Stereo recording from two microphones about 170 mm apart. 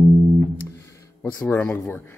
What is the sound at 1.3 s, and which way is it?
Speech, 10° left (ahead or behind).